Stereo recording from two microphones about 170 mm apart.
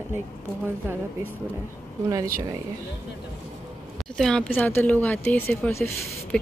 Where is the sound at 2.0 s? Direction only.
20° right (ahead or behind).